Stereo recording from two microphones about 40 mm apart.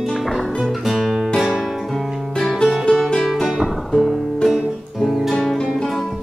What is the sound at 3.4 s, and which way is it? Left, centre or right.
Music, centre.